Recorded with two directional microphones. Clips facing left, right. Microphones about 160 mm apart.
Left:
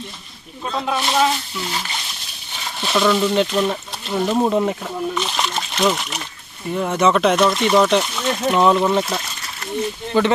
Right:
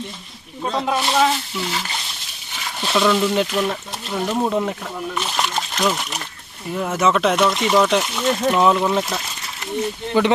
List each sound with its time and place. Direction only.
0.6 s speech: 20° right (ahead or behind)
0.9 s speech: 5° right (ahead or behind)
2.8 s speech: centre (ahead or behind)
5.1 s speech: 5° right (ahead or behind)
10.1 s speech: 15° right (ahead or behind)